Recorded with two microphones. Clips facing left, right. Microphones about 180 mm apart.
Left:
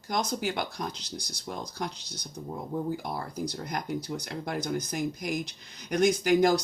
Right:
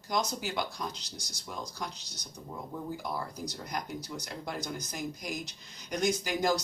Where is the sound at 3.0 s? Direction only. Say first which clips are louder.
Left 3 dB; 55° left (ahead or behind).